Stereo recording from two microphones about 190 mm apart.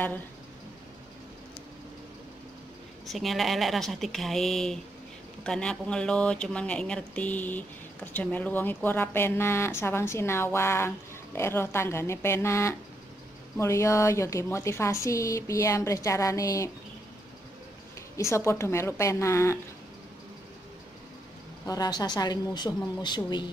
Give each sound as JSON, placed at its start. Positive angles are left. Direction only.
{"t": 3.1, "sound": "speech", "side_deg": 0}
{"t": 18.1, "sound": "speech", "side_deg": 15}
{"t": 21.6, "sound": "speech", "side_deg": 20}